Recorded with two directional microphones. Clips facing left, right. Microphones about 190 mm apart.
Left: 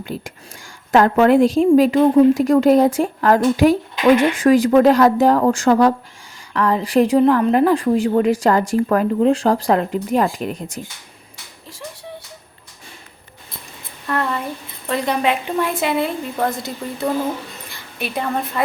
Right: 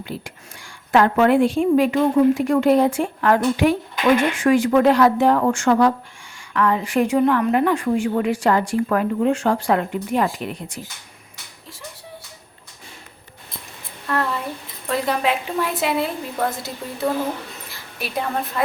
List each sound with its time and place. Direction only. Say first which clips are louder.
0.0 s speech: left 3 dB; 45° left (ahead or behind)
14.1 s a woman's voice: left 1 dB; centre (ahead or behind)